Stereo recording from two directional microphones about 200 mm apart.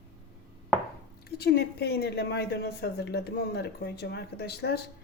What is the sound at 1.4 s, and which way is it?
A woman's voice, 55° left (ahead or behind).